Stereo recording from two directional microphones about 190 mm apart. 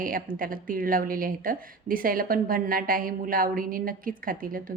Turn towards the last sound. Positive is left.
turn(degrees=-50)  # may be behind; listen again after turning